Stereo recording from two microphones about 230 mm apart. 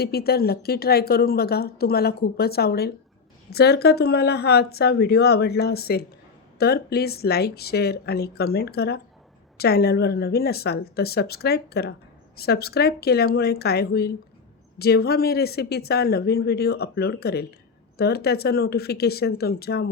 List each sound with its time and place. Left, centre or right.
0.0 s a woman's voice: left